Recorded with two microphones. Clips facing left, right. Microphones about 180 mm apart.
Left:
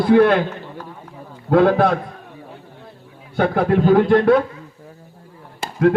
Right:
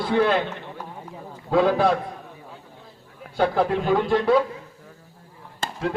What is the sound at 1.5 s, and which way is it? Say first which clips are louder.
Speech: left 5 dB; 60° left (ahead or behind).